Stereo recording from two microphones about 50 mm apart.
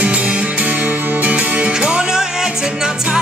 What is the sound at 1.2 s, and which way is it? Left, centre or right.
Music, right.